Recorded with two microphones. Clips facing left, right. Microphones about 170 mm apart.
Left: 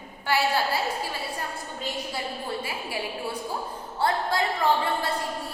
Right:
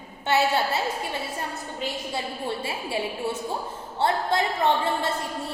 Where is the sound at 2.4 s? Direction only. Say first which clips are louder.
Right 2 dB; 25° right (ahead or behind).